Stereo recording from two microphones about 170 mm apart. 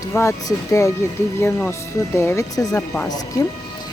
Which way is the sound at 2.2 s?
15° left (ahead or behind).